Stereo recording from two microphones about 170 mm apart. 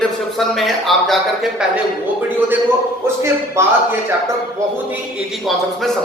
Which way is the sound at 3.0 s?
15° right (ahead or behind).